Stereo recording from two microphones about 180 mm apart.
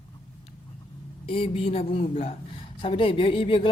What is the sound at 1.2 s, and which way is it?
A man's voice, 30° left (ahead or behind).